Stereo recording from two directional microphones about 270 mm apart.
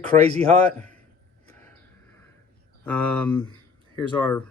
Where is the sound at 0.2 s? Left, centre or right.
Right.